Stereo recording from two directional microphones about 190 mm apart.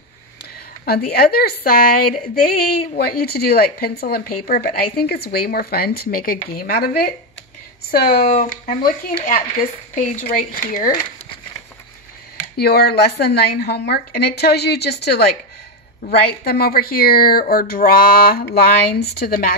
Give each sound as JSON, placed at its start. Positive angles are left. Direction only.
{"t": 0.8, "sound": "a woman's voice", "side_deg": 55}
{"t": 12.5, "sound": "a woman's voice", "side_deg": 55}